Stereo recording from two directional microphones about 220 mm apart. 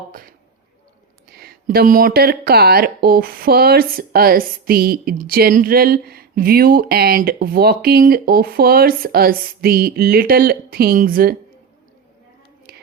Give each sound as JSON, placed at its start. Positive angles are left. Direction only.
{"t": 0.1, "sound": "speech", "side_deg": -40}
{"t": 12.7, "sound": "whispering", "side_deg": -45}